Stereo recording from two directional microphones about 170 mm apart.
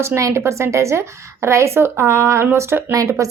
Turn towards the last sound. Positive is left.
turn(degrees=-20)  # may be behind; listen again after turning